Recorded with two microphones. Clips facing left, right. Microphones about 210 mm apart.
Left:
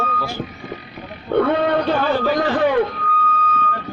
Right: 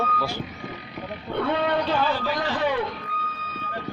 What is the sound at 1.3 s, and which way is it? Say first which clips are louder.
A man's voice: left 7 dB; 50° left (ahead or behind).